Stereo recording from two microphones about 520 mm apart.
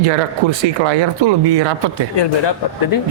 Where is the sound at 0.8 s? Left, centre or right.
Right.